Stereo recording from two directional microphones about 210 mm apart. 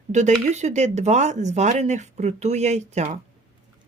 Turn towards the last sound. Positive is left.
turn(degrees=-35)  # may be behind; listen again after turning